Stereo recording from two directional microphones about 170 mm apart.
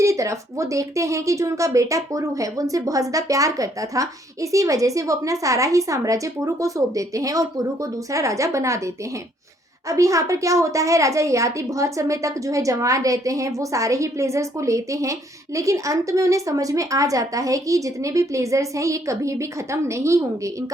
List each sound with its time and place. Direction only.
0.0 s a woman's voice: 20° right (ahead or behind)
9.9 s a woman's voice: 20° right (ahead or behind)